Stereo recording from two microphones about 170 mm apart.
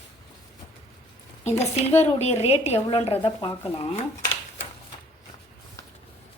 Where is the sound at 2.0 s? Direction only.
40° left (ahead or behind).